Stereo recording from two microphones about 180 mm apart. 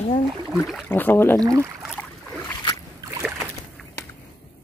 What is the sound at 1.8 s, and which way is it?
Boat, centre (ahead or behind).